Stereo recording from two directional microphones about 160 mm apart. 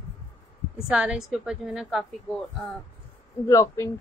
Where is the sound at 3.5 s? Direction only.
20° left (ahead or behind).